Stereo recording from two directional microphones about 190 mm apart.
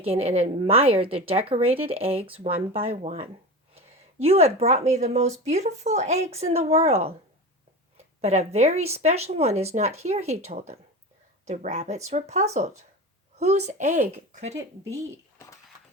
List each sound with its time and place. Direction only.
0.0 s speech: 30° right (ahead or behind)
8.2 s speech: 35° right (ahead or behind)